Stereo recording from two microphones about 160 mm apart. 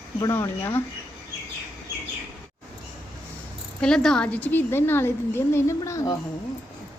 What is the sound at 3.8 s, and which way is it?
A woman's voice, 5° left (ahead or behind).